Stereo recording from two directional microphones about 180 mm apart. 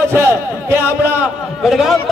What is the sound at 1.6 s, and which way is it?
Speech, centre (ahead or behind).